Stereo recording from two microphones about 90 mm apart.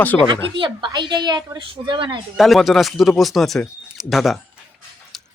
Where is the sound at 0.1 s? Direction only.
25° left (ahead or behind).